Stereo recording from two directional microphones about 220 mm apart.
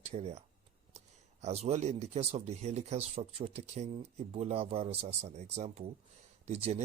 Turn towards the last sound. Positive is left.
turn(degrees=-30)  # may be behind; listen again after turning